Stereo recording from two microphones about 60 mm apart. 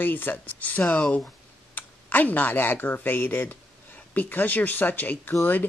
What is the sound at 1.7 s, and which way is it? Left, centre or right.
Speech, left.